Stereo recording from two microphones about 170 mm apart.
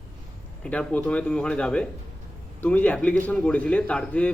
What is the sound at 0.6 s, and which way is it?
A man's voice, 5° left (ahead or behind).